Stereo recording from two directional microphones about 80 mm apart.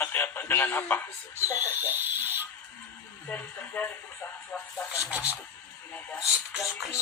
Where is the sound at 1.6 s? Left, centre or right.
Right.